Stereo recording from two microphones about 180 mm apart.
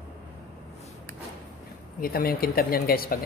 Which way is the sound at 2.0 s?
55° left (ahead or behind).